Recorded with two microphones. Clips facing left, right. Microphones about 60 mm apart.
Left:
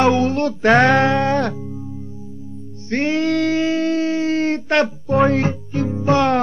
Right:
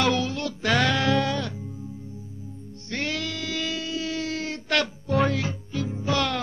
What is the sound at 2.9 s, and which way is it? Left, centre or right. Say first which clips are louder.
Music: left 11 dB; left.